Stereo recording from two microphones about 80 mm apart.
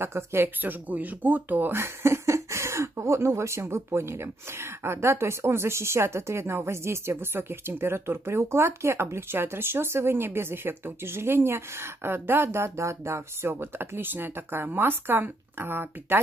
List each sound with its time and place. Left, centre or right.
0.0 s speech: right